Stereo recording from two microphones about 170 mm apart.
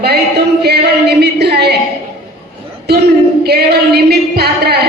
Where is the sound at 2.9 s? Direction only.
70° right (ahead or behind).